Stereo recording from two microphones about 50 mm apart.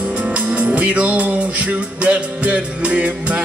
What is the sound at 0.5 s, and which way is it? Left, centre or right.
Music, right.